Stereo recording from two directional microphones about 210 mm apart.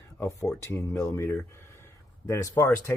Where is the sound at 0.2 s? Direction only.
15° left (ahead or behind).